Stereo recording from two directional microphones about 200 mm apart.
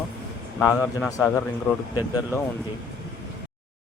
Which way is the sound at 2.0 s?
20° left (ahead or behind).